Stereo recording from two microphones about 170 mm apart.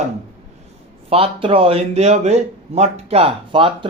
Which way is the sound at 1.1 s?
35° right (ahead or behind).